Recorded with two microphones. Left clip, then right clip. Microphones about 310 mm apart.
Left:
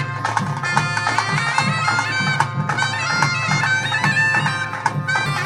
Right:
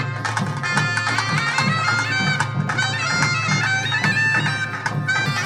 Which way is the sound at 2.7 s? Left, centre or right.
Right.